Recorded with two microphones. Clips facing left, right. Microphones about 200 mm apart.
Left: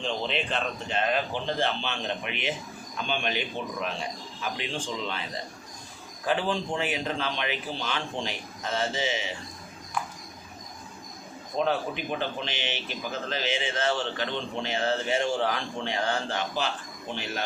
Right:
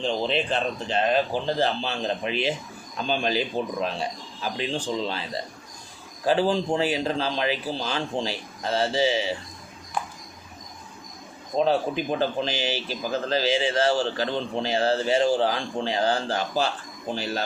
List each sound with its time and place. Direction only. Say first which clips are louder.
0.0 s speech: right 5 dB; 35° right (ahead or behind)
11.5 s speech: right 5 dB; 35° right (ahead or behind)